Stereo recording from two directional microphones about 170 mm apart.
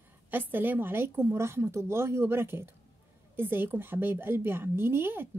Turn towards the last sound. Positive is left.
turn(degrees=-15)  # may be behind; listen again after turning